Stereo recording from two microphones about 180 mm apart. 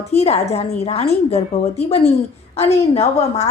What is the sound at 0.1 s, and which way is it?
A woman's voice, 35° left (ahead or behind).